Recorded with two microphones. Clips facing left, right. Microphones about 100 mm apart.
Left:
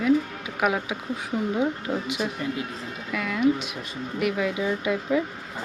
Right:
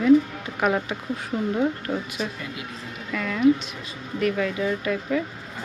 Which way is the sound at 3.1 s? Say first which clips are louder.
Right 3 dB; 5° left (ahead or behind).